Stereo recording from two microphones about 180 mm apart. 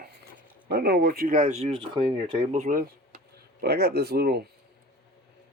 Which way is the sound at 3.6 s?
60° right (ahead or behind).